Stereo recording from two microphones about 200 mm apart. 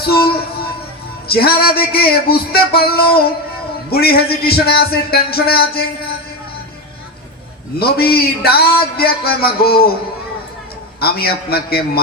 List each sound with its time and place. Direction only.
0.0 s speech: 50° left (ahead or behind)
1.3 s a man's voice: 50° left (ahead or behind)
7.8 s a man's voice: 50° left (ahead or behind)
11.0 s a man's voice: 50° left (ahead or behind)